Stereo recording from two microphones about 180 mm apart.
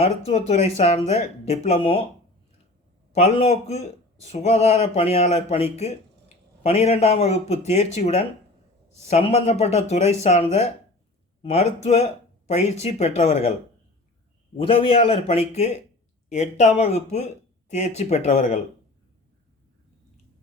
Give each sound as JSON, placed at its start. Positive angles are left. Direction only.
{"t": 0.3, "sound": "speech", "side_deg": 35}
{"t": 3.2, "sound": "a man's voice", "side_deg": 35}
{"t": 14.5, "sound": "speech", "side_deg": 30}